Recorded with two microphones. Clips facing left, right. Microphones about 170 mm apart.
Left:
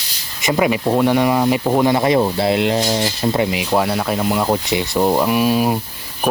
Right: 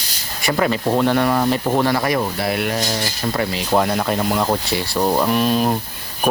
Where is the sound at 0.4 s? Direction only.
10° left (ahead or behind).